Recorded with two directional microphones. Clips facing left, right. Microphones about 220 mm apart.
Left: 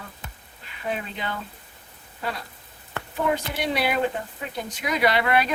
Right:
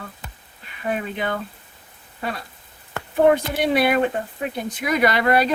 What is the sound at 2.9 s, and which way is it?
Speech, 50° right (ahead or behind).